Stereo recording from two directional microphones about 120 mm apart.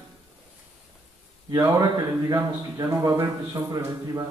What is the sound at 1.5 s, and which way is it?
A man's voice, 30° right (ahead or behind).